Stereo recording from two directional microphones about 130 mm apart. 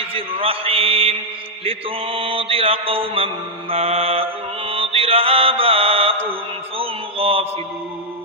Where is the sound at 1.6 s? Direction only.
45° right (ahead or behind).